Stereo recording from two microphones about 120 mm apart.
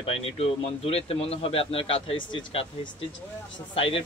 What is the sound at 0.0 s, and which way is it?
A man's voice, 55° left (ahead or behind).